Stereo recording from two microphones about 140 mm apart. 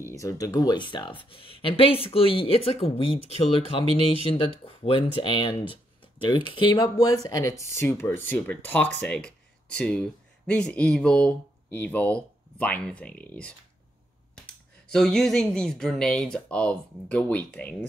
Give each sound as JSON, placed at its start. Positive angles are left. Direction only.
{"t": 0.1, "sound": "speech", "side_deg": 25}